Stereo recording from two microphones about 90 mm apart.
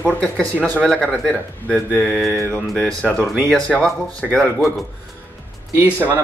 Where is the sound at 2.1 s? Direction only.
Centre (ahead or behind).